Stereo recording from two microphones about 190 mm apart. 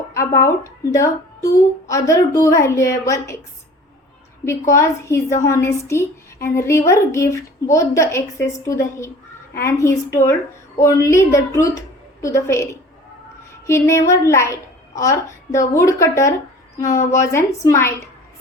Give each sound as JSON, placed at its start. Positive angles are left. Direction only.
{"t": 0.1, "sound": "a woman's voice", "side_deg": 15}
{"t": 4.7, "sound": "a woman's voice", "side_deg": 15}